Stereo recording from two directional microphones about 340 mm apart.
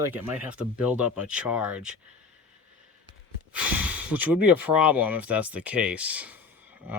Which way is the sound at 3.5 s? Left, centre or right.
Centre.